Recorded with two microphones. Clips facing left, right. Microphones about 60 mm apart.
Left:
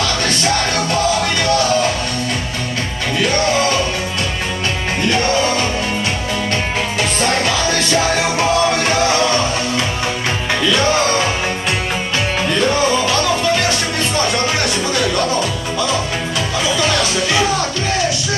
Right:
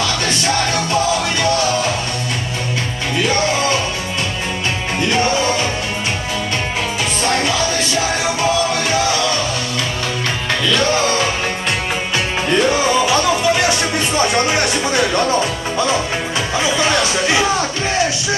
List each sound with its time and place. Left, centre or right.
10.6 s music: centre
12.5 s music: centre
16.6 s music: right